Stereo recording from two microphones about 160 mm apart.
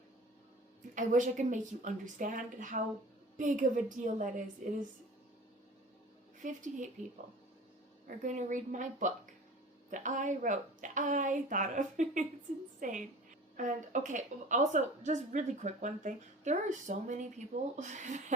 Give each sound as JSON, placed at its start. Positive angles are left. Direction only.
{"t": 0.9, "sound": "a woman's voice", "side_deg": -50}
{"t": 6.4, "sound": "a woman's voice", "side_deg": -50}
{"t": 8.0, "sound": "a woman's voice", "side_deg": -50}